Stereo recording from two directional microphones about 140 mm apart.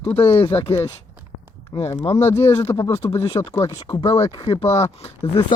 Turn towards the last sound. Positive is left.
turn(degrees=35)  # may be behind; listen again after turning